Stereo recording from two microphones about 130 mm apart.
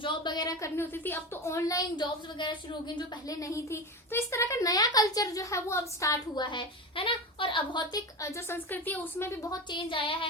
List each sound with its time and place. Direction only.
0.0 s speech: 35° left (ahead or behind)
8.2 s speech: 20° left (ahead or behind)
9.7 s a sound: 40° left (ahead or behind)